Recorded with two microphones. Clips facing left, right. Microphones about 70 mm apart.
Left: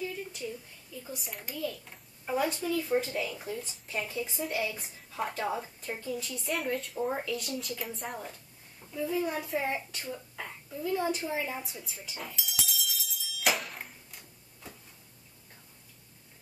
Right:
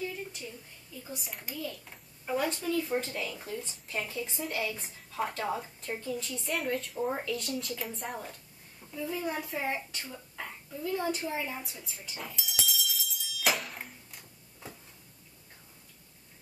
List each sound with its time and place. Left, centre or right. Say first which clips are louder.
0.0 s a sound: even; centre
1.1 s a child's voice: even; centre
11.8 s music: even; centre